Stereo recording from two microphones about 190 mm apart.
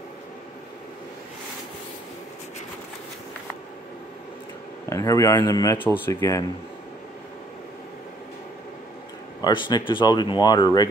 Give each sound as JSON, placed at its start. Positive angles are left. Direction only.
{"t": 4.8, "sound": "speech", "side_deg": 15}
{"t": 9.4, "sound": "speech", "side_deg": 25}